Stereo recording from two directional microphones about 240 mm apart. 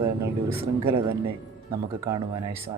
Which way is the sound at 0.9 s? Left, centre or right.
Right.